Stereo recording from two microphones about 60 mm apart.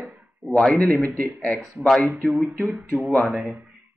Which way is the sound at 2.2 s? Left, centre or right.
Centre.